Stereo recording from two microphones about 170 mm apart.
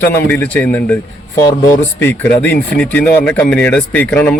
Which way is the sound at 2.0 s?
10° left (ahead or behind).